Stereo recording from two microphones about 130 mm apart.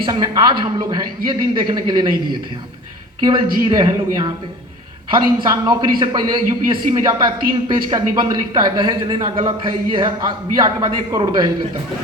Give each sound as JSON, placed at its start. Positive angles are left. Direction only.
{"t": 0.0, "sound": "a man's voice", "side_deg": -35}
{"t": 3.2, "sound": "a man's voice", "side_deg": -35}